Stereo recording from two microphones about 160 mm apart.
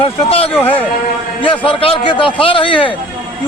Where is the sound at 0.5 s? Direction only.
10° left (ahead or behind).